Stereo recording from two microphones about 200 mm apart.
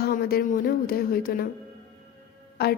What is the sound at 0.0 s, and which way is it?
A woman's voice, 50° left (ahead or behind).